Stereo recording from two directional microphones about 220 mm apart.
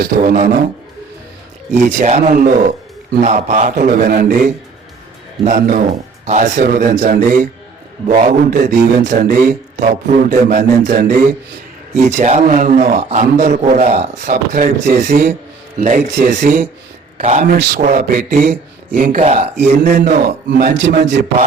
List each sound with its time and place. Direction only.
0.0 s speech: 40° right (ahead or behind)
1.8 s speech: 35° right (ahead or behind)
20.2 s speech: 45° right (ahead or behind)